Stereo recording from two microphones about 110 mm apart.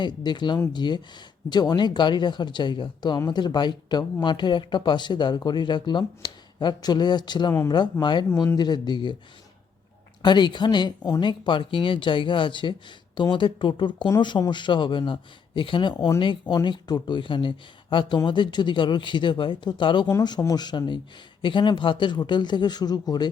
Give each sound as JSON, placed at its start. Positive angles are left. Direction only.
{"t": 0.0, "sound": "speech", "side_deg": 40}
{"t": 10.2, "sound": "speech", "side_deg": 45}
{"t": 20.4, "sound": "speech", "side_deg": 35}